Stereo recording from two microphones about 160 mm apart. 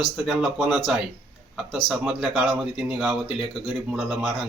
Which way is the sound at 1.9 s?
Centre (ahead or behind).